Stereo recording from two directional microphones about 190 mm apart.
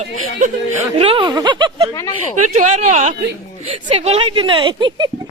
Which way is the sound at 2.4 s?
40° right (ahead or behind).